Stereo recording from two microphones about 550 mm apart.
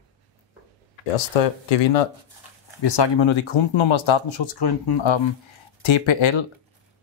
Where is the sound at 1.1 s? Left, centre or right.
Left.